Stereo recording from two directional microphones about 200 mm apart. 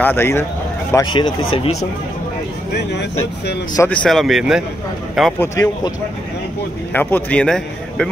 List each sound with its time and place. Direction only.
0.0 s a man's voice: 10° left (ahead or behind)
0.9 s speech: 25° left (ahead or behind)
2.7 s speech: 60° left (ahead or behind)
3.7 s speech: 10° left (ahead or behind)
6.9 s a man's voice: 10° left (ahead or behind)